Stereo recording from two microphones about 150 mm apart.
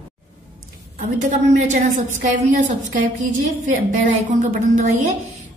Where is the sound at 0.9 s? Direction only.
55° right (ahead or behind).